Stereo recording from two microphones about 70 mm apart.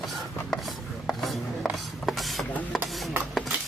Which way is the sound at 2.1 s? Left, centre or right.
Centre.